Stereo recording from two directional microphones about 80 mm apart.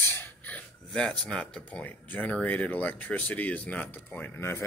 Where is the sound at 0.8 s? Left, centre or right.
Centre.